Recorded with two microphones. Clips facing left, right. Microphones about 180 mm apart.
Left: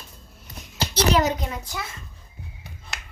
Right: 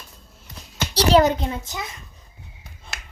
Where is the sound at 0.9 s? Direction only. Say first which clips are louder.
Right 5 dB; 35° right (ahead or behind).